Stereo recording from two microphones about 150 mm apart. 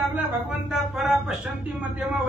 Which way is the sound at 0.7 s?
Centre (ahead or behind).